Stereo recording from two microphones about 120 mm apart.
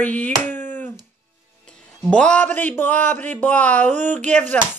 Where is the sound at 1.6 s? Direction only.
5° left (ahead or behind).